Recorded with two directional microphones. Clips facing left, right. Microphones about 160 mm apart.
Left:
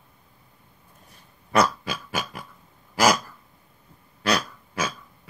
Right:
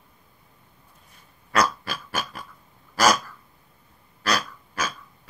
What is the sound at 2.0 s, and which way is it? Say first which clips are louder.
Pig: right 1 dB; 15° left (ahead or behind).